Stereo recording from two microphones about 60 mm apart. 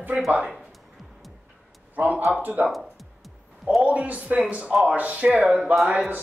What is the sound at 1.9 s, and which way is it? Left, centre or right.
Speech, right.